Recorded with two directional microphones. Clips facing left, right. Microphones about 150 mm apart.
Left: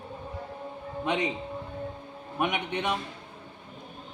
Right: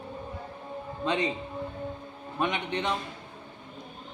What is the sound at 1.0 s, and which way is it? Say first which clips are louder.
Speech: even; 15° left (ahead or behind).